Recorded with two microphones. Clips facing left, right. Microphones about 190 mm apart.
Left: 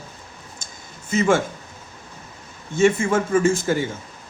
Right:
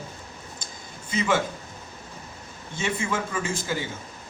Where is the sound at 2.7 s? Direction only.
45° left (ahead or behind).